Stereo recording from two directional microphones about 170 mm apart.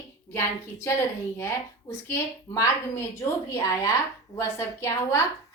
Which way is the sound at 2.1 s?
15° left (ahead or behind).